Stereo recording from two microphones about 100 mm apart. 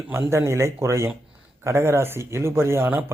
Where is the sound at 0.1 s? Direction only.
25° right (ahead or behind).